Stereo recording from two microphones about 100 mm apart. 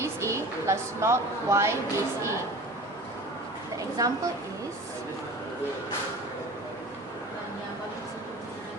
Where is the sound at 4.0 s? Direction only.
35° right (ahead or behind).